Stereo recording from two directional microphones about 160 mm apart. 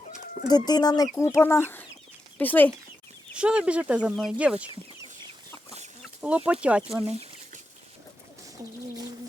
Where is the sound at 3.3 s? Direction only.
5° right (ahead or behind).